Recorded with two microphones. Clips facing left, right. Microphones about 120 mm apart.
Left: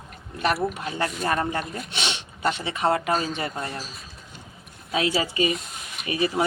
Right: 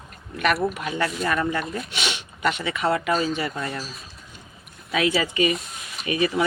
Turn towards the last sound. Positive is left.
turn(degrees=30)  # may be behind; listen again after turning